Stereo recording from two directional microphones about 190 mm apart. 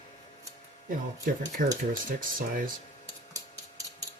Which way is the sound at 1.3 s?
50° right (ahead or behind).